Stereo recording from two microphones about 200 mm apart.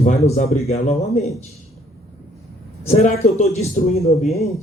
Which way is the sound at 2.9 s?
30° left (ahead or behind).